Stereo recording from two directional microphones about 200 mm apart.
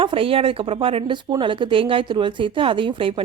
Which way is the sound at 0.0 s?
25° right (ahead or behind).